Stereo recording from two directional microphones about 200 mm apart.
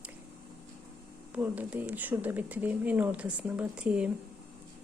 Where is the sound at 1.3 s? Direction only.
10° right (ahead or behind).